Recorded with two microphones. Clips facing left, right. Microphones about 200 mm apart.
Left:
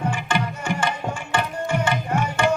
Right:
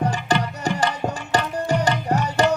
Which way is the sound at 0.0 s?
40° right (ahead or behind).